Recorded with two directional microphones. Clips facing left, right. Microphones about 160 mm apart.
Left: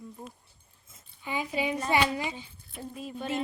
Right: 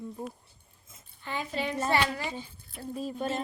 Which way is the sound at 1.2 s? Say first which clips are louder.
Left 2 dB; 10° left (ahead or behind).